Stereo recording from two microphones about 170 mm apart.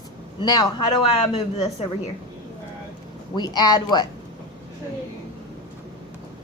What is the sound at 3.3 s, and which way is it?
Speech, 25° left (ahead or behind).